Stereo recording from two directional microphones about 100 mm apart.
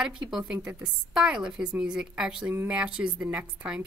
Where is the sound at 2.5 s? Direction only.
20° right (ahead or behind).